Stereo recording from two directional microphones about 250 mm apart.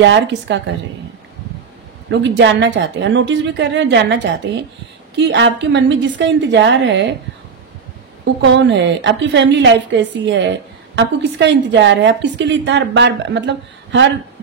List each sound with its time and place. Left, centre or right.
0.0 s a woman's voice: right
2.0 s a woman's voice: right
8.4 s a woman's voice: right